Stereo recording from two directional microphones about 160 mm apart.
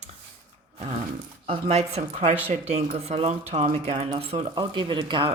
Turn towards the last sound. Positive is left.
turn(degrees=-30)  # may be behind; listen again after turning